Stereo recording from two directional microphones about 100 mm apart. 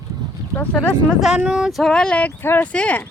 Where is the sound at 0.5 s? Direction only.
15° left (ahead or behind).